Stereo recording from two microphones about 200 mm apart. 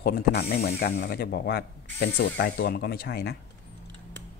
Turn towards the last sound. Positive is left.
turn(degrees=50)  # may be behind; listen again after turning